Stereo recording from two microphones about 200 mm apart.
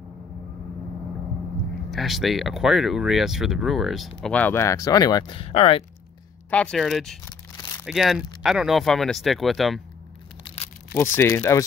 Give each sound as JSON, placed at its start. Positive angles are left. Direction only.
{"t": 1.9, "sound": "speech", "side_deg": 0}
{"t": 6.5, "sound": "speech", "side_deg": 5}
{"t": 10.4, "sound": "a sound", "side_deg": 30}
{"t": 11.1, "sound": "speech", "side_deg": 10}